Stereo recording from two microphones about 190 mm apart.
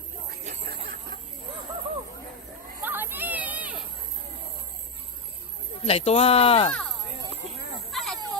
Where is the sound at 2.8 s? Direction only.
10° right (ahead or behind).